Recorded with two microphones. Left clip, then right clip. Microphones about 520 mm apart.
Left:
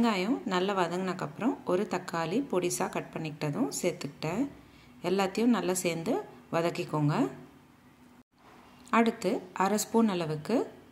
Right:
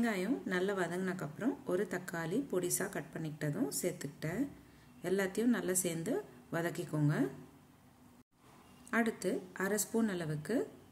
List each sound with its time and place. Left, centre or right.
0.0 s a woman's voice: right
8.9 s a woman's voice: right